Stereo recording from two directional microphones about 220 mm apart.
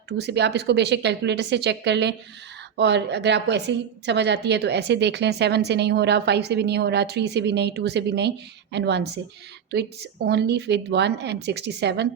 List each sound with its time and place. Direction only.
0.2 s a woman's voice: 50° right (ahead or behind)